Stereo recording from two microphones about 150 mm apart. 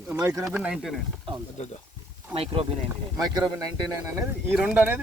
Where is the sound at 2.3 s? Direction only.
40° right (ahead or behind).